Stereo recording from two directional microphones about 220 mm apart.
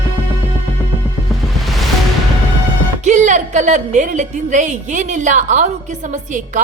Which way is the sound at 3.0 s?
35° right (ahead or behind).